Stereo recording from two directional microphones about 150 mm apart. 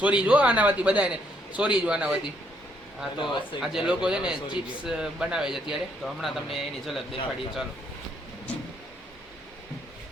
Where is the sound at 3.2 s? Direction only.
30° left (ahead or behind).